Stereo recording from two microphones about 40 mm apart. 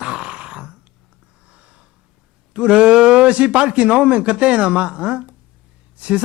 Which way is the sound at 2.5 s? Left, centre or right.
Right.